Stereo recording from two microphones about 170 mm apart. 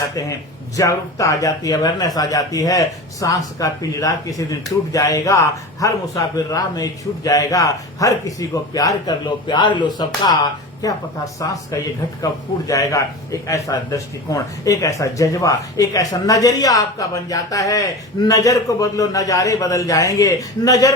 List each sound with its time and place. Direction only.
0.1 s speech: 20° left (ahead or behind)